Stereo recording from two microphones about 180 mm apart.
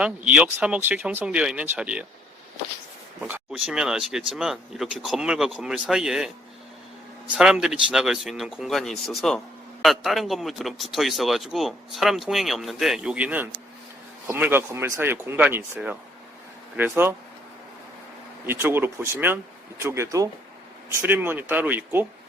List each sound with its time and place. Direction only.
0.0 s speech: 5° right (ahead or behind)
3.2 s speech: 5° right (ahead or behind)
7.3 s speech: 5° right (ahead or behind)
18.4 s speech: 10° right (ahead or behind)